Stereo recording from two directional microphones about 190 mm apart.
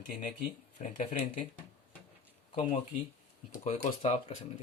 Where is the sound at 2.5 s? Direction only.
35° left (ahead or behind).